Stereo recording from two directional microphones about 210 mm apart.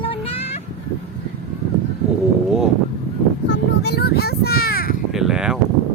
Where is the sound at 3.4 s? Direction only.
55° left (ahead or behind).